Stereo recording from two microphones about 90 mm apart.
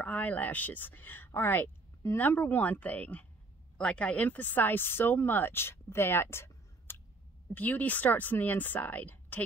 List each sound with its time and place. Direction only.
0.0 s speech: 20° left (ahead or behind)